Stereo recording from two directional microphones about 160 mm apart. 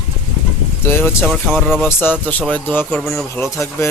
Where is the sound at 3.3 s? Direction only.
15° left (ahead or behind).